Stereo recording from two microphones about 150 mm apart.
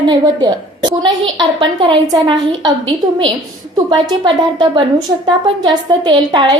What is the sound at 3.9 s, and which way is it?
A woman's voice, 30° right (ahead or behind).